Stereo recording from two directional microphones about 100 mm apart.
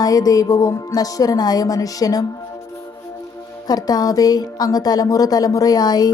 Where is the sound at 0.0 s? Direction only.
40° left (ahead or behind).